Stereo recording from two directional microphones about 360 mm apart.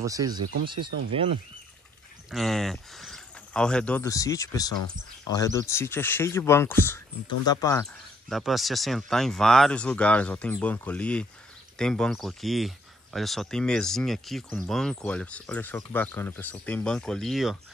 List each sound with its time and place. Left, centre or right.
0.0 s speech: centre
0.8 s speech: right
2.3 s speech: centre